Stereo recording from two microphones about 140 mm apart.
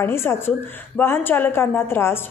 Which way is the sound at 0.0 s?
15° left (ahead or behind).